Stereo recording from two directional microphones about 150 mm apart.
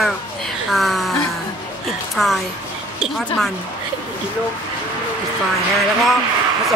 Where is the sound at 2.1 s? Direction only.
Centre (ahead or behind).